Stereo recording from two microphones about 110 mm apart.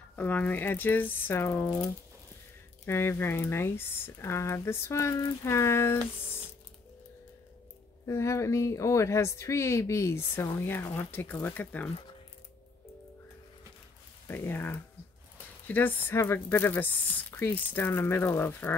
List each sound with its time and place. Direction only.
0.1 s speech: 15° left (ahead or behind)
2.8 s speech: 20° left (ahead or behind)
8.1 s speech: 25° left (ahead or behind)
14.2 s speech: 20° left (ahead or behind)